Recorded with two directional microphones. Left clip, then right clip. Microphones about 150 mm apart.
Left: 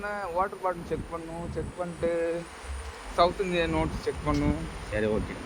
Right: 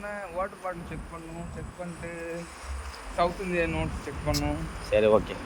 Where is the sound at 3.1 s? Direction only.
30° left (ahead or behind).